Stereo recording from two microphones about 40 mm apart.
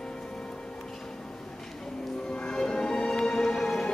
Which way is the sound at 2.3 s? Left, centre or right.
Centre.